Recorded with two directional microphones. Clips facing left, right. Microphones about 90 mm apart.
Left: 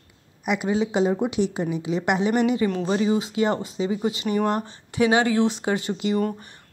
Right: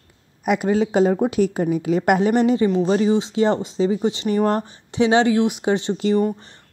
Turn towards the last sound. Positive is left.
turn(degrees=-30)  # may be behind; listen again after turning